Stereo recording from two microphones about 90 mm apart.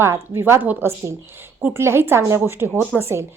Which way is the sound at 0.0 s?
30° right (ahead or behind).